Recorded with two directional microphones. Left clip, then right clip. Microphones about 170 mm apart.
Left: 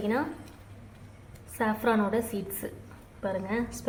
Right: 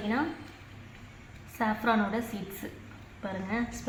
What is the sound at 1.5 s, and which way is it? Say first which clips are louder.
A woman's voice: left 1 dB; 60° left (ahead or behind).